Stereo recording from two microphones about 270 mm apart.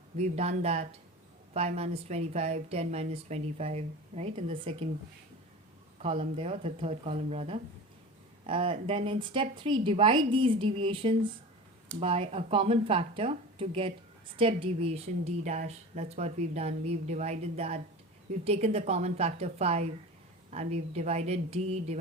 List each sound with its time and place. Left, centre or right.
0.2 s a woman's voice: right
6.0 s a woman's voice: right